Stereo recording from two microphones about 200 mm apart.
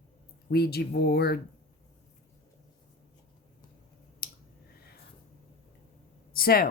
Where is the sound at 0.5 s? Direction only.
55° left (ahead or behind).